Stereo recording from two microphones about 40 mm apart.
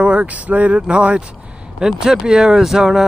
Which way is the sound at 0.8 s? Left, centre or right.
Right.